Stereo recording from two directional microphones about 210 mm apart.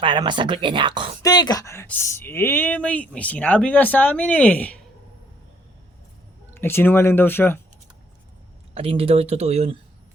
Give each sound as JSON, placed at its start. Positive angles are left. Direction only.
{"t": 0.0, "sound": "speech", "side_deg": -25}
{"t": 1.2, "sound": "speech", "side_deg": 20}
{"t": 6.5, "sound": "speech", "side_deg": 10}
{"t": 8.7, "sound": "speech", "side_deg": -25}